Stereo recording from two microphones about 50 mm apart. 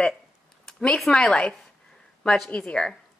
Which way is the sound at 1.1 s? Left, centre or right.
Centre.